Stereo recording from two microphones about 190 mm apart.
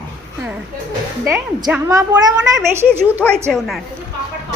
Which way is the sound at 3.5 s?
Centre (ahead or behind).